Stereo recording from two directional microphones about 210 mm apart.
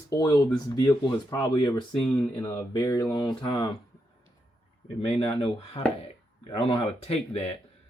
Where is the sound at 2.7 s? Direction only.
20° left (ahead or behind).